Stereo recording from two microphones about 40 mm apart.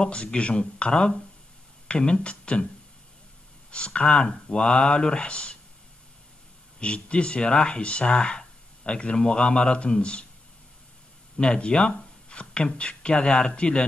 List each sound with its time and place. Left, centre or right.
0.0 s speech: left
3.7 s speech: left
6.8 s speech: left
11.3 s speech: left